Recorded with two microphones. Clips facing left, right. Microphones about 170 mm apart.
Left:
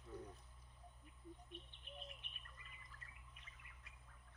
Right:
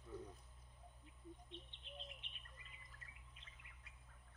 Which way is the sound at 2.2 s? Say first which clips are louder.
Even; 25° right (ahead or behind).